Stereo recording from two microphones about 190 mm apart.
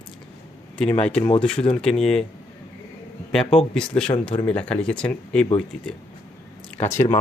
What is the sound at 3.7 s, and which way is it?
Speech, 5° left (ahead or behind).